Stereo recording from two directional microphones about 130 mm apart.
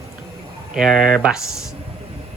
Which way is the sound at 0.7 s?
5° right (ahead or behind).